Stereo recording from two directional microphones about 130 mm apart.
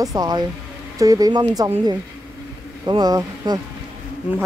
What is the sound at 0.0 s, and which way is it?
Speech, 30° right (ahead or behind).